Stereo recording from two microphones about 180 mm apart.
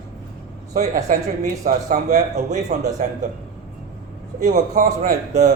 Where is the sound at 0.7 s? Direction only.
45° right (ahead or behind).